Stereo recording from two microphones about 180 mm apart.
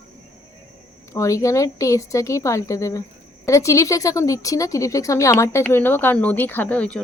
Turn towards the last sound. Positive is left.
turn(degrees=10)  # may be behind; listen again after turning